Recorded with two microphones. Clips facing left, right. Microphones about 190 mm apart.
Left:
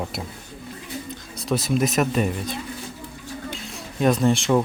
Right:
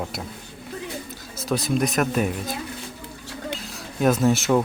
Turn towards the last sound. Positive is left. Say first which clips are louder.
# even
turn(degrees=-5)  # may be behind; listen again after turning